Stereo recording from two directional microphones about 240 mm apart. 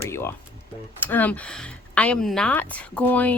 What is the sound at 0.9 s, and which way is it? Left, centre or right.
Speech, centre.